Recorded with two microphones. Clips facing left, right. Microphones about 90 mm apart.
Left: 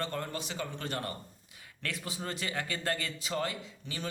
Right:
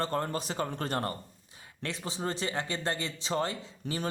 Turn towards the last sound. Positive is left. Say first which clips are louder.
# right 6 dB
turn(degrees=-45)  # may be behind; listen again after turning